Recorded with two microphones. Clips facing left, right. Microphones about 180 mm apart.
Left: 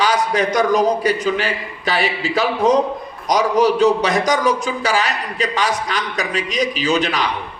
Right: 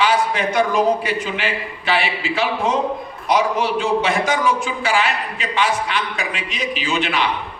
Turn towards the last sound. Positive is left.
turn(degrees=40)  # may be behind; listen again after turning